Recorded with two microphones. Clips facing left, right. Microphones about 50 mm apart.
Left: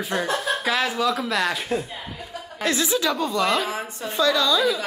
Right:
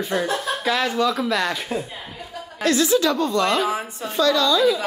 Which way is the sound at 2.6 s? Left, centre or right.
Centre.